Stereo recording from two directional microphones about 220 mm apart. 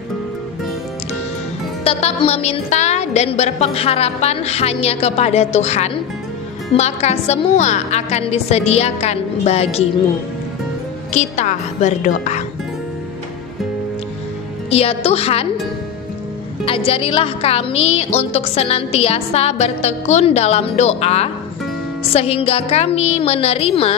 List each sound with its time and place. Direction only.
1.9 s a woman's voice: 25° left (ahead or behind)
11.1 s a woman's voice: 35° left (ahead or behind)
14.7 s a woman's voice: 25° left (ahead or behind)
16.6 s a woman's voice: 25° left (ahead or behind)